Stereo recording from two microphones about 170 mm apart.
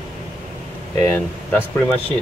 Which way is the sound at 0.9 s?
15° left (ahead or behind).